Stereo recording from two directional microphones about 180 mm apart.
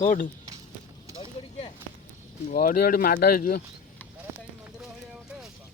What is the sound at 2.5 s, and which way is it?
Speech, 55° left (ahead or behind).